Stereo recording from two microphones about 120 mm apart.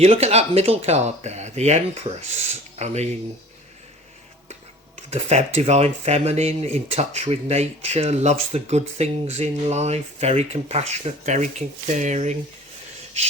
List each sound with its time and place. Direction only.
0.0 s speech: 60° right (ahead or behind)
5.1 s speech: 70° right (ahead or behind)